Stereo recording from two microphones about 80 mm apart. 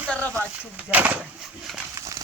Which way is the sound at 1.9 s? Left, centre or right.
Right.